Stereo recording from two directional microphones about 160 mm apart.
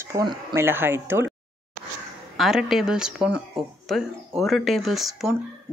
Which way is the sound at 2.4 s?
Centre (ahead or behind).